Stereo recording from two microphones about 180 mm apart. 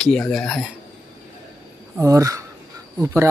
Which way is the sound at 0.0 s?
5° left (ahead or behind).